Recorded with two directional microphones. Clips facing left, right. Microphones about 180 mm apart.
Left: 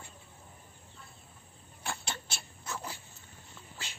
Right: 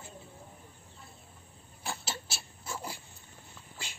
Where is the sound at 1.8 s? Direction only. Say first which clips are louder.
Right 1 dB; 5° right (ahead or behind).